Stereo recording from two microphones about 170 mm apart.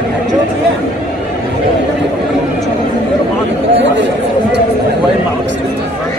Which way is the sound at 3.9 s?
90° right.